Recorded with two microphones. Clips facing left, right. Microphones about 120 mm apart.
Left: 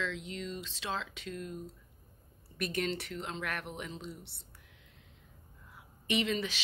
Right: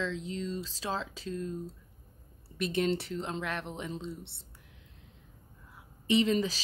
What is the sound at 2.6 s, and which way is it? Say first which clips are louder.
Speech: right 5 dB; 30° right (ahead or behind).